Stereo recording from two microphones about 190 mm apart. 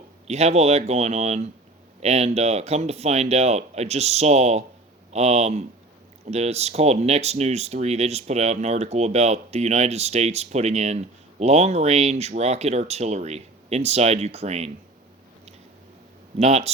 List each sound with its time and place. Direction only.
0.3 s speech: 35° right (ahead or behind)
16.4 s speech: 35° right (ahead or behind)